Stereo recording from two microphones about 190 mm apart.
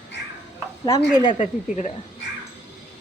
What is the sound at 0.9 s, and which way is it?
Speech, 20° left (ahead or behind).